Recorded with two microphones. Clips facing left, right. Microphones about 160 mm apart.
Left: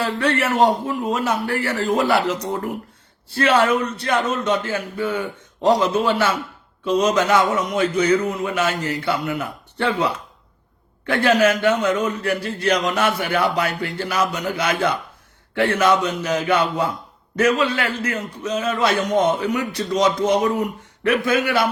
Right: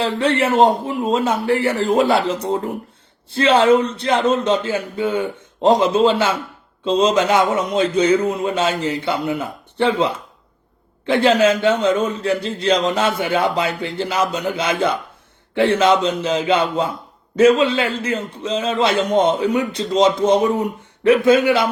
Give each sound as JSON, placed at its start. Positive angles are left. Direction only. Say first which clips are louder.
{"t": 0.0, "sound": "a man's voice", "louder": "right 3 dB", "side_deg": -25}